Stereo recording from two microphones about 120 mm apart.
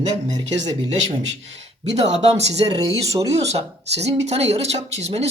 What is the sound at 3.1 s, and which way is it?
Speech, 30° right (ahead or behind).